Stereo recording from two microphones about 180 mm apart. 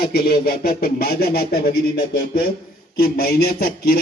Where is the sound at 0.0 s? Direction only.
60° left (ahead or behind).